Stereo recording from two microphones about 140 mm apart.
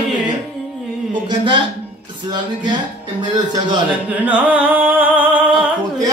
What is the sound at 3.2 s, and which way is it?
Speech, 30° right (ahead or behind).